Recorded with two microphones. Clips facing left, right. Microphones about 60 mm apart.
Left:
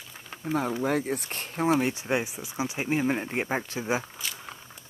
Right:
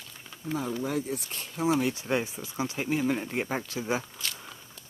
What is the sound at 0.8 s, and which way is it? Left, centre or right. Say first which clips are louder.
Speech: left 4 dB; left.